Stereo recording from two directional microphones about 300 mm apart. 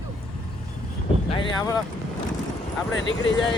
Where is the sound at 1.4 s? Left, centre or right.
Centre.